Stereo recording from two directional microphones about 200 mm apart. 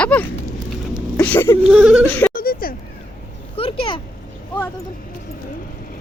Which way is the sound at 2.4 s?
45° left (ahead or behind).